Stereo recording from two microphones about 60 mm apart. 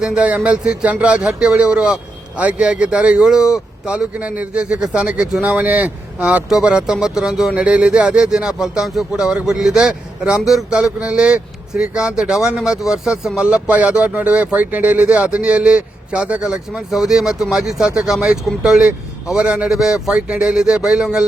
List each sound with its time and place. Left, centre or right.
0.0 s speech: centre